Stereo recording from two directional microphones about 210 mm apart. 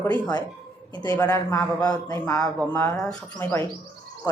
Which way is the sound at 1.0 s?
15° left (ahead or behind).